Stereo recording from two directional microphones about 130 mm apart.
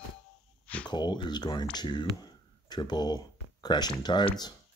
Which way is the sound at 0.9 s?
35° left (ahead or behind).